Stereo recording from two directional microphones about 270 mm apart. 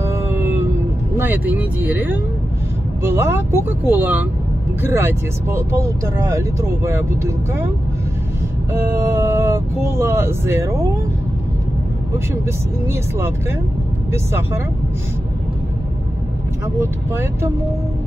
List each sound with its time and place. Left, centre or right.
0.0 s music: centre
1.1 s speech: centre
8.7 s speech: centre
16.8 s speech: centre